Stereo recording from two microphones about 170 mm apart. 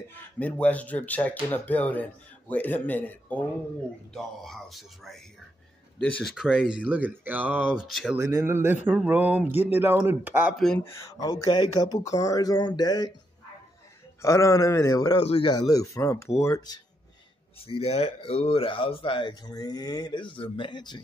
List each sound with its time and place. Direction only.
0.4 s speech: 10° left (ahead or behind)
8.2 s speech: 15° right (ahead or behind)
10.5 s speech: centre (ahead or behind)
10.8 s speech: 15° left (ahead or behind)
14.2 s speech: 15° left (ahead or behind)
15.1 s speech: 35° left (ahead or behind)
15.5 s speech: 20° left (ahead or behind)
17.6 s speech: 35° left (ahead or behind)